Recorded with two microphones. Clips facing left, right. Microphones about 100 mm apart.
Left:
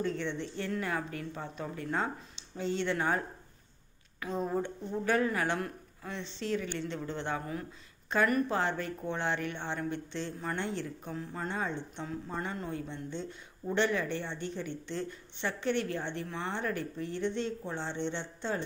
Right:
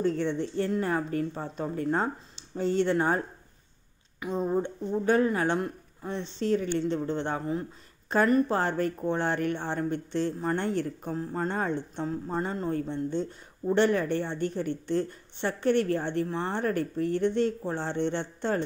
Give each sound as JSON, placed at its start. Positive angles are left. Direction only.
{"t": 0.0, "sound": "speech", "side_deg": -40}
{"t": 4.5, "sound": "a woman's voice", "side_deg": -25}
{"t": 8.5, "sound": "a woman's voice", "side_deg": -45}